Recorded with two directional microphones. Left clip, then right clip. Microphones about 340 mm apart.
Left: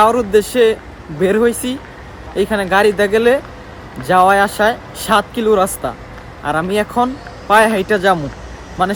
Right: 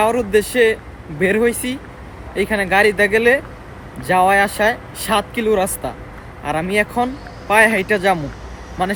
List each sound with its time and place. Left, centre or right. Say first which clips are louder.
0.0 s speech: left 4 dB; centre